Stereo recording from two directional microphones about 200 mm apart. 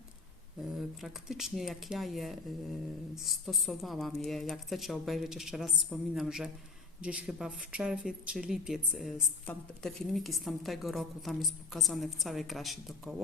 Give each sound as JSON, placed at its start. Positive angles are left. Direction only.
{"t": 0.8, "sound": "speech", "side_deg": 0}